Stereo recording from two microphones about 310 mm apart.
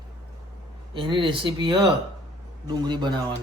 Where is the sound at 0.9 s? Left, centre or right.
Centre.